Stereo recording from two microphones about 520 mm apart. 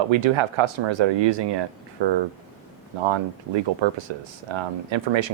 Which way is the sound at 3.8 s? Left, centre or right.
Right.